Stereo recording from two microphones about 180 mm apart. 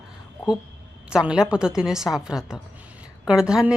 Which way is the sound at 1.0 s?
5° right (ahead or behind).